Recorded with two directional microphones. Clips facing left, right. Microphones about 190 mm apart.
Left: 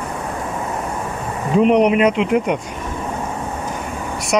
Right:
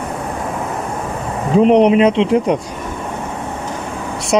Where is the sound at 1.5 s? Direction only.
30° right (ahead or behind).